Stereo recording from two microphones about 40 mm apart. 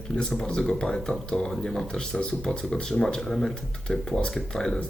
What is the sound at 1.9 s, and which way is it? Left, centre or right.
Speech, left.